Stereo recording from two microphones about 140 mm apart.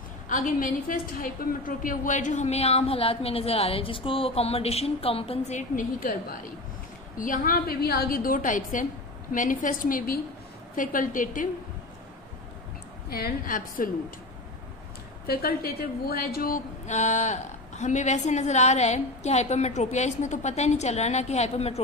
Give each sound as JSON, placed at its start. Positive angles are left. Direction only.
{"t": 0.3, "sound": "a woman's voice", "side_deg": 70}
{"t": 7.2, "sound": "a woman's voice", "side_deg": 75}
{"t": 10.8, "sound": "a woman's voice", "side_deg": 70}
{"t": 13.1, "sound": "a woman's voice", "side_deg": 80}
{"t": 15.2, "sound": "a woman's voice", "side_deg": 90}